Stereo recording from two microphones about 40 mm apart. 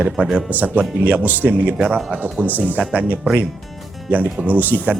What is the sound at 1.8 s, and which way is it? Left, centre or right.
Speech, right.